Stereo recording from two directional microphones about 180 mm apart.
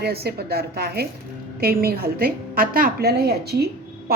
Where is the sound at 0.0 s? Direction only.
60° right (ahead or behind).